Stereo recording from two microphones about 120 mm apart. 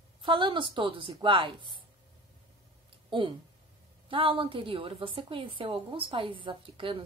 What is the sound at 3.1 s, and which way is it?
A woman's voice, 45° right (ahead or behind).